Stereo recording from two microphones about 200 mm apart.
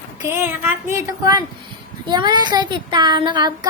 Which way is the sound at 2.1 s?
20° right (ahead or behind).